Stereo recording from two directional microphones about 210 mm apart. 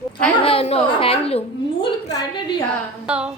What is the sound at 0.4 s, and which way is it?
A child's voice, 30° left (ahead or behind).